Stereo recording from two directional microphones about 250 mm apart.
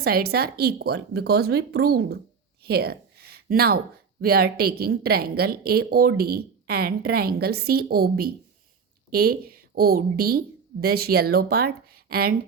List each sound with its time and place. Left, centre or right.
0.0 s a woman's voice: right
2.6 s a sound: right
4.2 s a woman's voice: right